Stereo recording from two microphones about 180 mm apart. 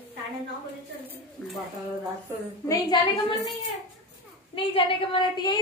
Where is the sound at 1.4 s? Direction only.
5° left (ahead or behind).